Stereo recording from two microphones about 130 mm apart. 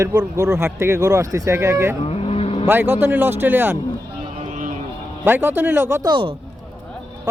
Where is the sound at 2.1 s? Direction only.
50° left (ahead or behind).